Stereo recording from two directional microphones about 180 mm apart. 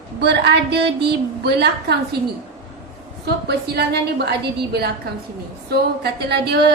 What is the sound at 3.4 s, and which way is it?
Female singing, 65° right (ahead or behind).